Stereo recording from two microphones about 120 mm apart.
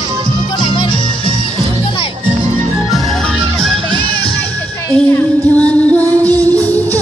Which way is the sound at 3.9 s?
15° left (ahead or behind).